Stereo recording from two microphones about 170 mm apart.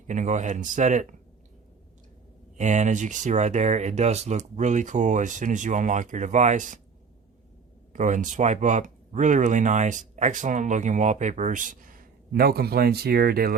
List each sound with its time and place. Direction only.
0.1 s speech: 45° right (ahead or behind)
2.6 s speech: 45° right (ahead or behind)
7.9 s speech: 45° right (ahead or behind); by 13.5 s 65° right (ahead or behind)